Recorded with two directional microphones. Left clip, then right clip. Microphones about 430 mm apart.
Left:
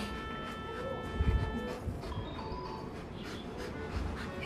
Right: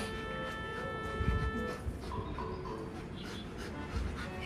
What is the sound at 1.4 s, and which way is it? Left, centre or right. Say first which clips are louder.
Music: right 1 dB; centre.